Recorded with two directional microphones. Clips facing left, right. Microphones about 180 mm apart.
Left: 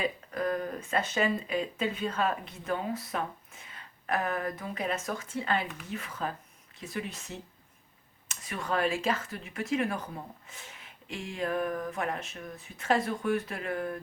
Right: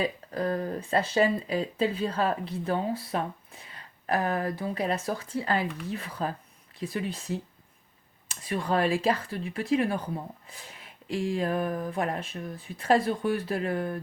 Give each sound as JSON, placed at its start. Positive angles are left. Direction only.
{"t": 0.0, "sound": "speech", "side_deg": -30}